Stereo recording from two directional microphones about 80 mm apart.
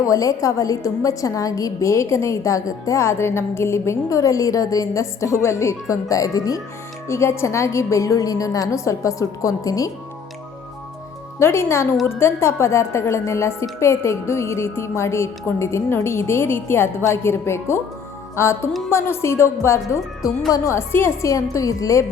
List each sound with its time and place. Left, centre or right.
0.0 s a woman's voice: left
7.1 s a woman's voice: left
11.3 s a woman's voice: left
21.5 s a woman's voice: left